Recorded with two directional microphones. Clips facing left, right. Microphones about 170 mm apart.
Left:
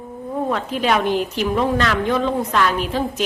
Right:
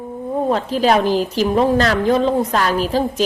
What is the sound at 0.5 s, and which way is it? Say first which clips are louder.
A woman's voice: right 4 dB; 35° right (ahead or behind).